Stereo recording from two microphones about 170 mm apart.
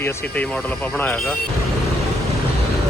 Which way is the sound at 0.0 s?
15° left (ahead or behind).